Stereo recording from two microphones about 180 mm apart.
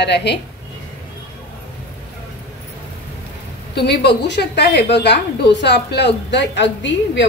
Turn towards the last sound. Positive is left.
turn(degrees=80)